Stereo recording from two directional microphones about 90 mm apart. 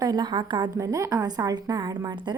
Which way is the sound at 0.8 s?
40° right (ahead or behind).